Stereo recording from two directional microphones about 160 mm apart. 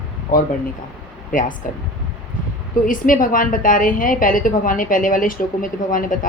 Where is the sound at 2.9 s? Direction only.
60° left (ahead or behind).